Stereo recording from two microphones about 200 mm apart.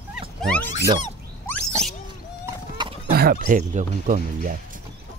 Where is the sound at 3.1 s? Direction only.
50° right (ahead or behind).